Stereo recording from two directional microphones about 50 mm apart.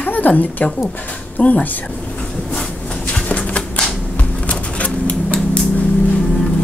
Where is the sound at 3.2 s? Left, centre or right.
Left.